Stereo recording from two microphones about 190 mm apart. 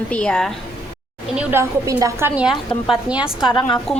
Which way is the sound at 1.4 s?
10° right (ahead or behind).